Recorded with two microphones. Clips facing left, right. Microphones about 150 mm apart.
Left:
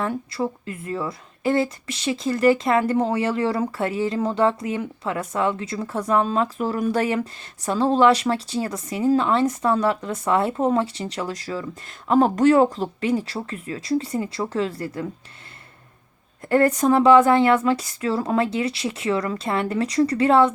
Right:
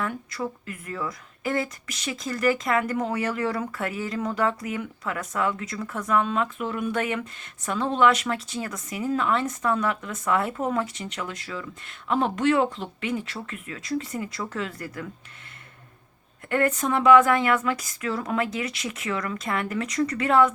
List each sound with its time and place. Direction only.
0.0 s speech: 30° left (ahead or behind)
16.5 s speech: 35° left (ahead or behind)